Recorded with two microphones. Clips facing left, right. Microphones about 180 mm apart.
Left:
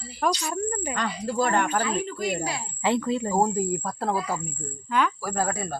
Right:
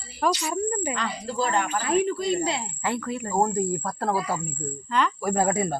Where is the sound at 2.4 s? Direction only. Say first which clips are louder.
Right 4 dB; 25° right (ahead or behind).